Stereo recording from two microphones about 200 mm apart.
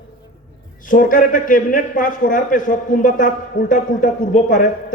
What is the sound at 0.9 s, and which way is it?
A man's voice, 40° left (ahead or behind).